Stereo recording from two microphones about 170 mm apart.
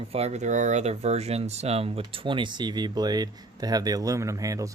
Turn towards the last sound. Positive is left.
turn(degrees=-20)  # may be behind; listen again after turning